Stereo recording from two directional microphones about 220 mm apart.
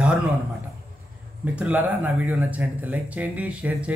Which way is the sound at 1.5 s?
5° right (ahead or behind).